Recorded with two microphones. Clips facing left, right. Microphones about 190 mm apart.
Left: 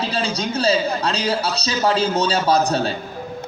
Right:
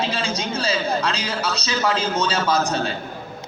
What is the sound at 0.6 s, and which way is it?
A man's voice, 35° left (ahead or behind).